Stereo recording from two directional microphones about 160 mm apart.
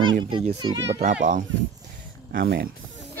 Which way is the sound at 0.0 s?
30° right (ahead or behind).